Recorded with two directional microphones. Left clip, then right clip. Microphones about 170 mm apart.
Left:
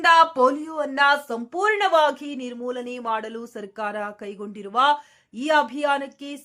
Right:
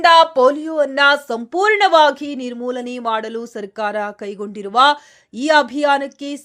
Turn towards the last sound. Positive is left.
turn(degrees=-30)  # may be behind; listen again after turning